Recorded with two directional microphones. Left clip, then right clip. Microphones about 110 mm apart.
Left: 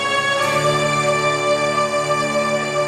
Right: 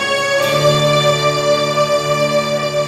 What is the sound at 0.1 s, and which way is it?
Music, 45° left (ahead or behind).